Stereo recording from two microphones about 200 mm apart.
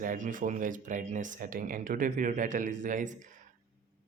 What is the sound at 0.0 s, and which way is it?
Speech, 40° right (ahead or behind).